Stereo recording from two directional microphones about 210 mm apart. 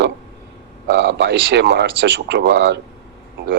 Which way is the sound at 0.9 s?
55° right (ahead or behind).